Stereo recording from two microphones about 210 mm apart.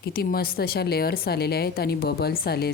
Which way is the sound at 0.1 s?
45° left (ahead or behind).